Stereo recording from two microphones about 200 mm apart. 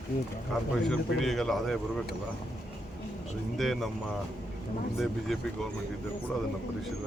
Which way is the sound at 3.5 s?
Centre (ahead or behind).